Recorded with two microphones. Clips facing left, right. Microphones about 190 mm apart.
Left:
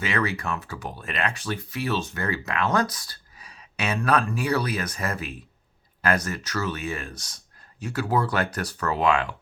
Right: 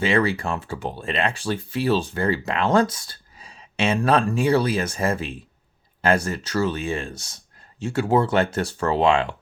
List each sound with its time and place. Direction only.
0.0 s speech: 30° right (ahead or behind)